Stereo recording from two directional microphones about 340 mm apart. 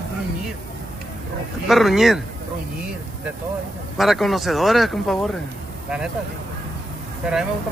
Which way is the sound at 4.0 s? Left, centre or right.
Centre.